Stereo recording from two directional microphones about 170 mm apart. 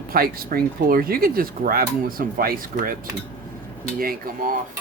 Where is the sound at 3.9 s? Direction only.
55° right (ahead or behind).